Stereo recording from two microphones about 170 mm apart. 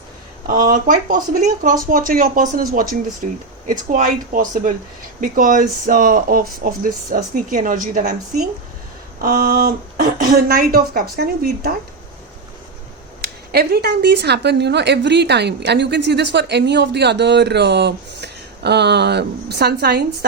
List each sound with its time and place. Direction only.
0.4 s speech: 55° right (ahead or behind)
3.7 s speech: 50° right (ahead or behind); by 11.7 s 70° right (ahead or behind)
13.2 s a woman's voice: 65° right (ahead or behind)